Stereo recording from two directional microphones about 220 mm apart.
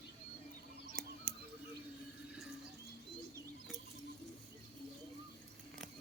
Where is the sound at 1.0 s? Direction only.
5° left (ahead or behind).